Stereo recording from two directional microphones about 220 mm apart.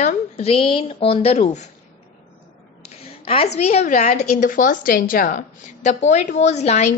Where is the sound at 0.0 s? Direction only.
25° left (ahead or behind).